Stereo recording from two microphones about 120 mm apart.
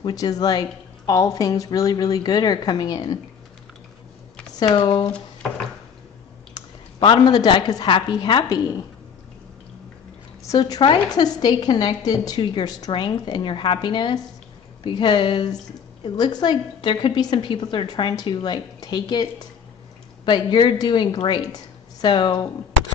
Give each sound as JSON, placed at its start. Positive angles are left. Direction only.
{"t": 0.0, "sound": "a woman's voice", "side_deg": 30}
{"t": 4.6, "sound": "a woman's voice", "side_deg": 35}
{"t": 7.0, "sound": "a woman's voice", "side_deg": 40}
{"t": 10.4, "sound": "a woman's voice", "side_deg": 30}
{"t": 20.2, "sound": "a woman's voice", "side_deg": 40}